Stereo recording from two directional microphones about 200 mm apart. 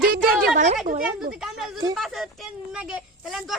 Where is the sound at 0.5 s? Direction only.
35° right (ahead or behind).